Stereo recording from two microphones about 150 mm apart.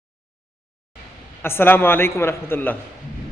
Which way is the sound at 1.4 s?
15° left (ahead or behind).